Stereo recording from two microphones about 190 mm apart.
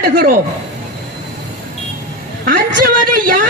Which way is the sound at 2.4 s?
50° right (ahead or behind).